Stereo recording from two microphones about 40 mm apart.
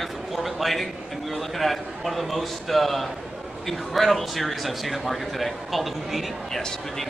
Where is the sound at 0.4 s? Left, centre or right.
Centre.